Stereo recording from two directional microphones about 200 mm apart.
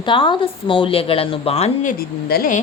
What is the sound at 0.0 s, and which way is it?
A man's voice, 25° left (ahead or behind).